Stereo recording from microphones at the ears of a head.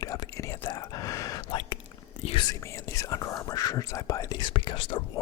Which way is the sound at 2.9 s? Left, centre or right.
Left.